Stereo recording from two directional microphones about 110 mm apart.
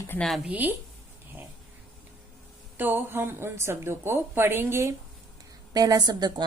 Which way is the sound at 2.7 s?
20° right (ahead or behind).